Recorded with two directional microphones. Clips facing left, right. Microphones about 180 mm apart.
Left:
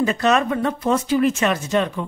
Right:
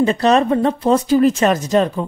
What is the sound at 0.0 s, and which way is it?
Speech, 30° right (ahead or behind).